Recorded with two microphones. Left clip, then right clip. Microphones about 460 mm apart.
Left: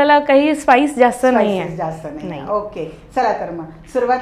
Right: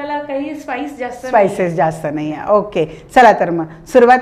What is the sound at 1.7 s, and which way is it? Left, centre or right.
A woman's voice, right.